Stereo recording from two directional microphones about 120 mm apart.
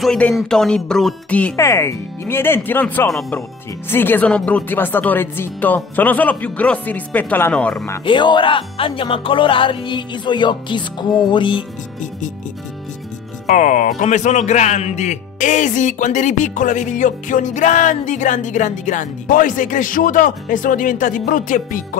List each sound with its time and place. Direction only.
0.0 s speech: 5° left (ahead or behind)
1.6 s speech: 25° left (ahead or behind)
3.1 s speech: 5° left (ahead or behind)
3.9 s speech: 15° left (ahead or behind)
8.0 s music: 40° left (ahead or behind)
13.5 s speech: 90° left